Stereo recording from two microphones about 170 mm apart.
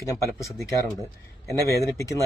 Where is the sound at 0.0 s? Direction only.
20° left (ahead or behind).